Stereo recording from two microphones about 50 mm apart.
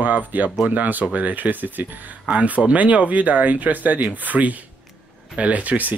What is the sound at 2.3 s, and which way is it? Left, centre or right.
Speech, right.